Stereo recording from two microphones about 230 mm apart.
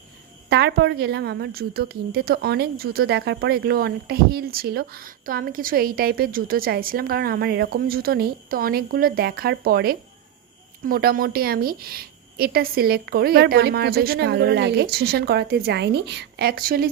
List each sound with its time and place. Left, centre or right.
0.5 s a woman's voice: right